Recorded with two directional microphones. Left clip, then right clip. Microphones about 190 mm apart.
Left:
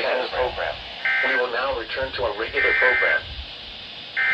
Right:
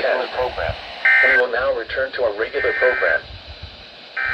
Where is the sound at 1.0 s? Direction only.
50° right (ahead or behind).